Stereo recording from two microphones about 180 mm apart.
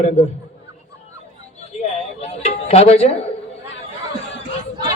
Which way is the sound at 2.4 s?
35° left (ahead or behind).